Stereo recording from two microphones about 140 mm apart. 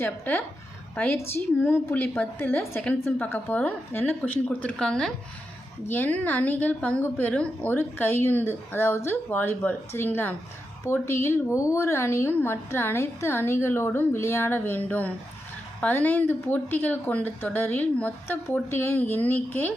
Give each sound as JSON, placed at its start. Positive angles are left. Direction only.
{"t": 0.0, "sound": "speech", "side_deg": 15}